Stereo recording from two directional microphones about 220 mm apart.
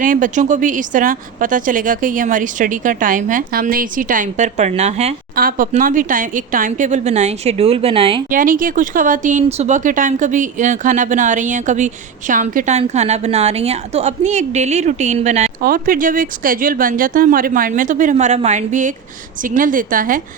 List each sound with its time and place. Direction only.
0.0 s a woman's voice: 35° right (ahead or behind)
8.3 s a woman's voice: 40° right (ahead or behind)